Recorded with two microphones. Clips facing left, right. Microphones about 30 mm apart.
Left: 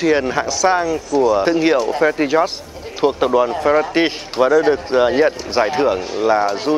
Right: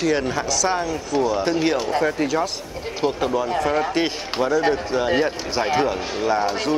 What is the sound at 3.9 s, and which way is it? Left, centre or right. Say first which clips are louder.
A man's voice: left 5 dB; centre.